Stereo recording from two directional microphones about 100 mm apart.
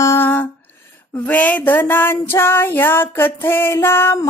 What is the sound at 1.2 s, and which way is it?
Female singing, 15° left (ahead or behind).